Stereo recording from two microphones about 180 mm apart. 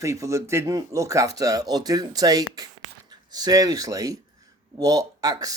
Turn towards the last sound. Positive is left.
turn(degrees=-20)  # may be behind; listen again after turning